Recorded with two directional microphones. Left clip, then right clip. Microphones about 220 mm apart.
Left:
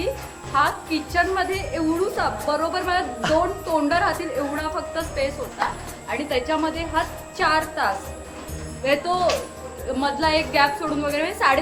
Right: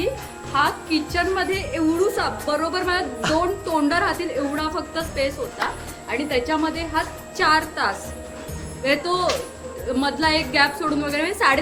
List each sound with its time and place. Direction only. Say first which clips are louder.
0.5 s a woman's voice: even; 15° right (ahead or behind)
3.2 s a woman's voice: left 3 dB; centre (ahead or behind)
3.7 s a woman's voice: even; 15° right (ahead or behind)